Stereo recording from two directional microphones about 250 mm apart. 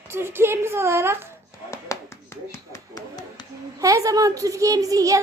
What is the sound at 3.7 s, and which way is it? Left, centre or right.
A woman's voice, centre.